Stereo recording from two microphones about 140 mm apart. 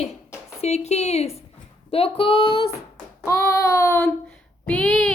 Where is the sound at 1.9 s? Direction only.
40° left (ahead or behind).